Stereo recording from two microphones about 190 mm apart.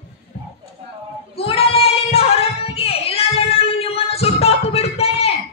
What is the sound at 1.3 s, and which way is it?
Child singing, 30° left (ahead or behind).